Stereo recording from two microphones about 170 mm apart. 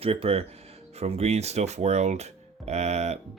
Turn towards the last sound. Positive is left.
turn(degrees=-40)  # may be behind; listen again after turning